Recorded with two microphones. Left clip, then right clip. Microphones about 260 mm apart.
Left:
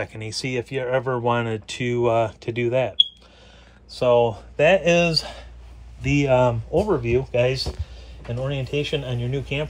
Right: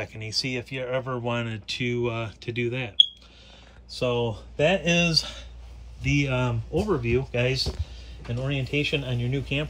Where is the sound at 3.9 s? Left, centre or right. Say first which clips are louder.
Left 9 dB; centre.